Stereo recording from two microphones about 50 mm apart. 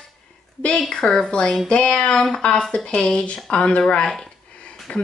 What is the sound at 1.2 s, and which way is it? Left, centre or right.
A woman's voice, centre.